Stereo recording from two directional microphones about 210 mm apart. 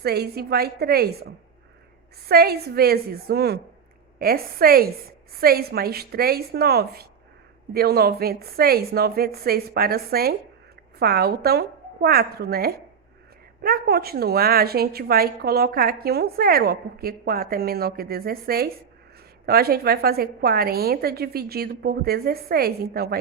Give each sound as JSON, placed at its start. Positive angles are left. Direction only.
{"t": 0.0, "sound": "a woman's voice", "side_deg": -50}
{"t": 2.2, "sound": "a woman's voice", "side_deg": -45}